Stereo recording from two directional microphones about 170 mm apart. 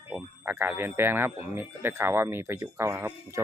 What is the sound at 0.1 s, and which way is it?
Speech, 10° right (ahead or behind).